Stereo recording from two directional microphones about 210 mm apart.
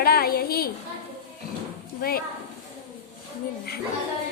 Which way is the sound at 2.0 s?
45° left (ahead or behind).